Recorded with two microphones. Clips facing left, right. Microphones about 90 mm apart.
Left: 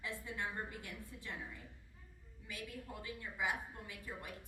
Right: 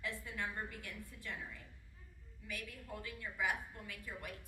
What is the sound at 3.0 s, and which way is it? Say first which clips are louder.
A woman's voice: right 1 dB; 20° left (ahead or behind).